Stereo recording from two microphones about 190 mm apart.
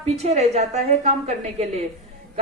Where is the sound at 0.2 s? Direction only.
35° right (ahead or behind).